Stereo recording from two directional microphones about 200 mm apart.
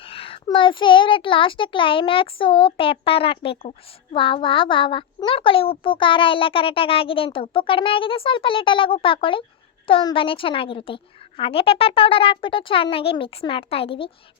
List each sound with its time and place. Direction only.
0.0 s a child's voice: 25° left (ahead or behind)